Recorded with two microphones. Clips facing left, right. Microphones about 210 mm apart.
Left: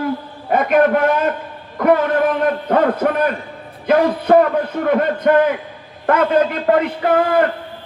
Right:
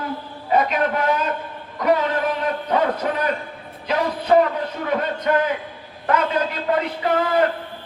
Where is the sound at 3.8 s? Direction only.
55° left (ahead or behind).